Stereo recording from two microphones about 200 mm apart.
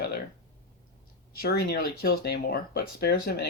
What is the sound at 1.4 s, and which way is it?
Speech, 50° left (ahead or behind).